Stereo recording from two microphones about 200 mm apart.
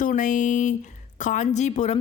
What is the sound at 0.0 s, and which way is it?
A woman's voice, 40° left (ahead or behind).